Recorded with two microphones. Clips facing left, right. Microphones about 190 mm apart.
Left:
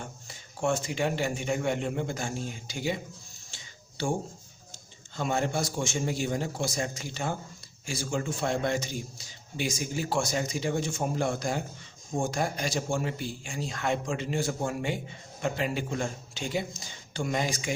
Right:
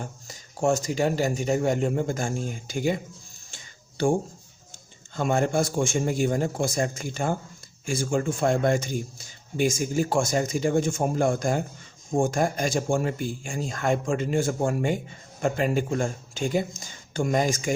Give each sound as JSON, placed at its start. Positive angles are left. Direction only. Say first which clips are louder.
{"t": 0.0, "sound": "speech", "louder": "right 4 dB", "side_deg": -40}
{"t": 3.5, "sound": "a sound", "louder": "right 2 dB", "side_deg": -50}
{"t": 5.1, "sound": "a man's voice", "louder": "right 5 dB", "side_deg": -50}